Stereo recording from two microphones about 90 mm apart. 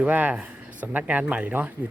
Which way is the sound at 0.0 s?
20° right (ahead or behind).